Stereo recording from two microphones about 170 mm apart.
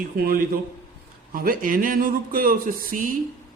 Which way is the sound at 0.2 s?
65° right (ahead or behind).